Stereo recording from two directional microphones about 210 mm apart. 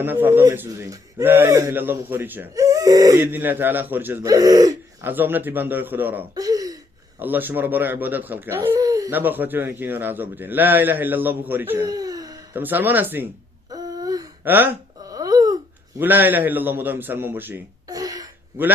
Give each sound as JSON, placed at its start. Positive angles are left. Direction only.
{"t": 0.0, "sound": "speech", "side_deg": -10}
{"t": 13.7, "sound": "a sound", "side_deg": -15}
{"t": 16.0, "sound": "a man's voice", "side_deg": -10}